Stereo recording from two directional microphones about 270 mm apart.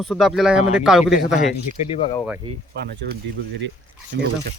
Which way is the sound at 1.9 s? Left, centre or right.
Left.